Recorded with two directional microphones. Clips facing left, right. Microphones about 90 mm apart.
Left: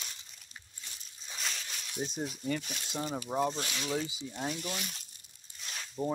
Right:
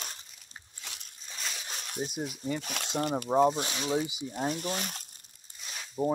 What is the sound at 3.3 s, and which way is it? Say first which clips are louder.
Speech: right 8 dB; 15° right (ahead or behind).